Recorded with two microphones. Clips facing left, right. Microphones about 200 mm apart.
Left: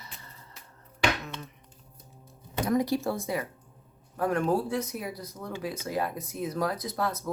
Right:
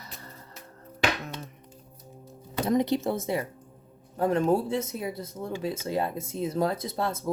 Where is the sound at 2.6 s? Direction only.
20° right (ahead or behind).